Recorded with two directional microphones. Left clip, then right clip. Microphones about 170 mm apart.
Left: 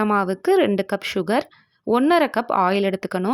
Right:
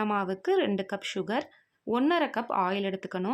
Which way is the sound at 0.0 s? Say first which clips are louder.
Left 9 dB; 30° left (ahead or behind).